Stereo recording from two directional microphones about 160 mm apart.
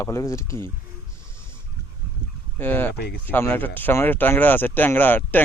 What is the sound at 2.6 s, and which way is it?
Speech, 10° left (ahead or behind).